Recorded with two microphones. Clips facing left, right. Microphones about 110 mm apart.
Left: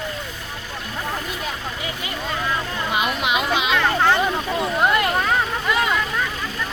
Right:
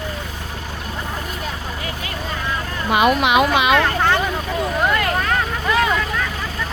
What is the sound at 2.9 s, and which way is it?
Speech, 60° right (ahead or behind).